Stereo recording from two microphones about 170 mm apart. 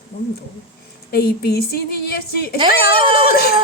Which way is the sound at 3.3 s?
65° left (ahead or behind).